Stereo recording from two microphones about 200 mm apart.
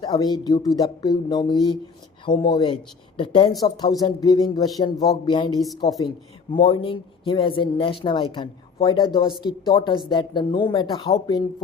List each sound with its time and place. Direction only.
0.0 s speech: 20° left (ahead or behind)